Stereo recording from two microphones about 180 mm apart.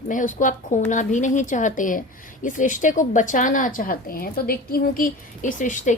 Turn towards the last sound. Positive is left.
turn(degrees=45)  # may be behind; listen again after turning